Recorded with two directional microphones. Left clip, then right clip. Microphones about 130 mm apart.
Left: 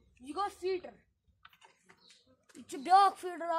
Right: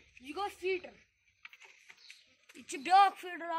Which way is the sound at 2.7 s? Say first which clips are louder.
Even; 70° left (ahead or behind).